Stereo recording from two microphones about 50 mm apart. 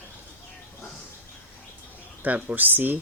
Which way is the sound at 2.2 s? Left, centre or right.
Right.